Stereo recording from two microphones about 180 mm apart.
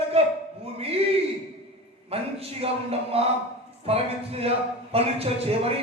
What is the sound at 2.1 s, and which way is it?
A man's voice, 35° right (ahead or behind).